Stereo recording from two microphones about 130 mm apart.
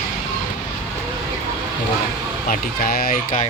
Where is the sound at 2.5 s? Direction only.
90° left.